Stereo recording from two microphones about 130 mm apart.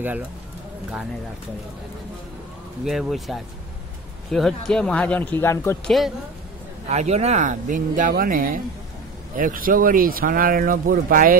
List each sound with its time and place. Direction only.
2.8 s speech: centre (ahead or behind); by 5.8 s 20° left (ahead or behind)
5.9 s speech: centre (ahead or behind)
6.9 s speech: 55° right (ahead or behind); by 11.3 s 90° right